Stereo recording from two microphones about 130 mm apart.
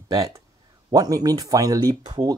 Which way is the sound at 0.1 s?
25° right (ahead or behind).